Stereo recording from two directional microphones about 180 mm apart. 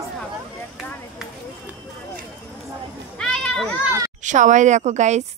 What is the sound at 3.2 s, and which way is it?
Children playing, 5° left (ahead or behind).